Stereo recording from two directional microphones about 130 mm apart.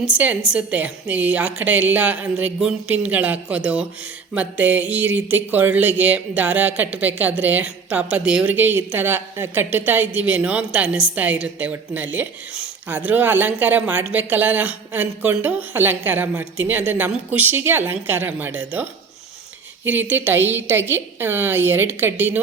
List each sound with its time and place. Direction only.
0.1 s speech: 10° right (ahead or behind)